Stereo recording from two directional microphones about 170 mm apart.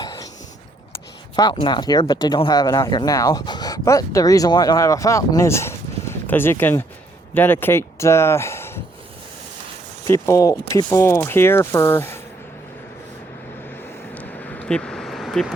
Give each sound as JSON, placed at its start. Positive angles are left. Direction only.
{"t": 1.4, "sound": "speech", "side_deg": 25}
{"t": 10.1, "sound": "speech", "side_deg": 20}
{"t": 14.1, "sound": "vehicle", "side_deg": 10}